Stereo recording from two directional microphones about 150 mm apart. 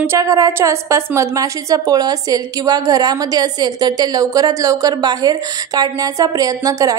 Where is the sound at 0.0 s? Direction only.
20° right (ahead or behind).